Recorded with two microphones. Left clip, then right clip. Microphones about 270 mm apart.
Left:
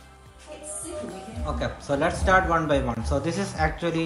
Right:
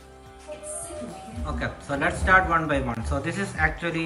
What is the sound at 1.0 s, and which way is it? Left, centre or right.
Speech, centre.